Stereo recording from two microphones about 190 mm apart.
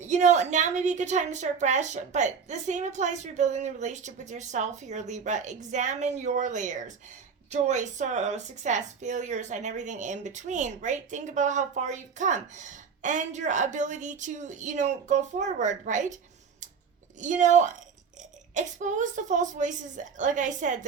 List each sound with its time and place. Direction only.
0.0 s speech: 40° right (ahead or behind)
17.2 s speech: 40° right (ahead or behind)